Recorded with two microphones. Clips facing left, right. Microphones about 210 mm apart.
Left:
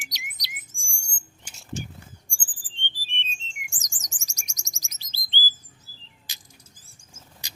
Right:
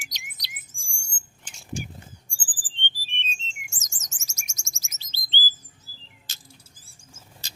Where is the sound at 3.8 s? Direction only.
15° left (ahead or behind).